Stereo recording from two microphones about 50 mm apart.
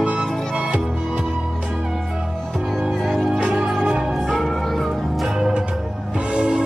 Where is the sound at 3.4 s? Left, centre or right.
Centre.